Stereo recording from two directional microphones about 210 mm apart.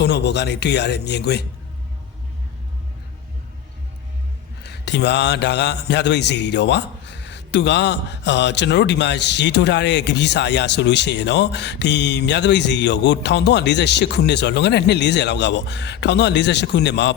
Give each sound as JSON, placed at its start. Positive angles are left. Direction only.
{"t": 0.0, "sound": "speech", "side_deg": 55}
{"t": 4.6, "sound": "mantra", "side_deg": 55}